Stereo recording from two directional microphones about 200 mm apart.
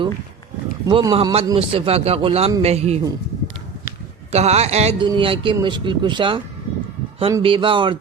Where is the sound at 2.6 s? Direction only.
30° right (ahead or behind).